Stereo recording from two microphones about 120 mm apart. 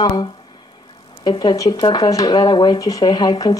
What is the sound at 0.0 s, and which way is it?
Speech, 35° left (ahead or behind).